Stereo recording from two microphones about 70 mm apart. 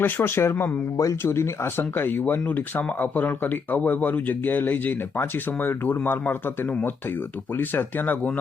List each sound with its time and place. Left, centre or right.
0.0 s speech: left
0.9 s speech: left
1.3 s speech: left